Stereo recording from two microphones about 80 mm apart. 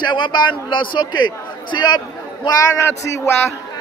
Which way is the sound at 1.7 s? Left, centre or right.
Left.